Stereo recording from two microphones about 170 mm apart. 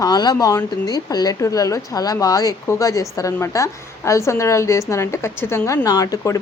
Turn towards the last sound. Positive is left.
turn(degrees=20)  # may be behind; listen again after turning